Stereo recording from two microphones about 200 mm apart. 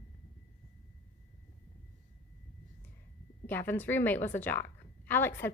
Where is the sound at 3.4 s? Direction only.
10° left (ahead or behind).